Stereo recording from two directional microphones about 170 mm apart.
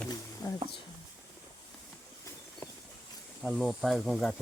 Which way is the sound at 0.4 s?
20° left (ahead or behind).